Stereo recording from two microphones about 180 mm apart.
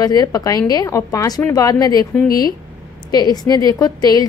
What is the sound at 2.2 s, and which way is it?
Speech, 55° left (ahead or behind).